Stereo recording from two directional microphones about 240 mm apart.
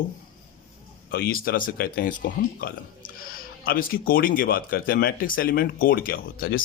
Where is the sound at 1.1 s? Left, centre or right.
Left.